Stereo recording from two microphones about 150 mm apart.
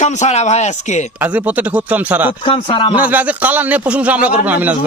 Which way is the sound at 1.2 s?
10° right (ahead or behind).